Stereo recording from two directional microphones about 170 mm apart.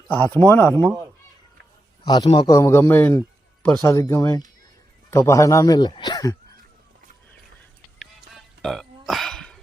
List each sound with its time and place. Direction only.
0.3 s speech: 15° left (ahead or behind)
2.0 s a man's voice: 25° left (ahead or behind)
7.9 s music: centre (ahead or behind)